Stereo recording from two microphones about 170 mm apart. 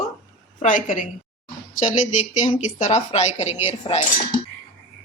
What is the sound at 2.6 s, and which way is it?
Speech, 45° left (ahead or behind).